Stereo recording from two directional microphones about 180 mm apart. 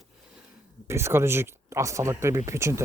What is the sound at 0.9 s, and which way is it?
Speech, 15° right (ahead or behind).